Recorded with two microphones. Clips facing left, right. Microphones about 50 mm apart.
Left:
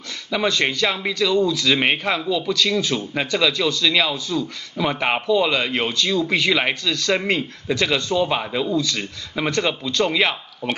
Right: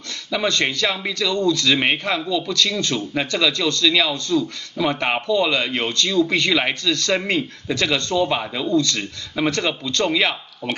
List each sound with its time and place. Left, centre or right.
0.3 s speech: centre